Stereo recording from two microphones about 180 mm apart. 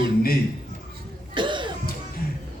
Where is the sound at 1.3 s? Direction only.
25° right (ahead or behind).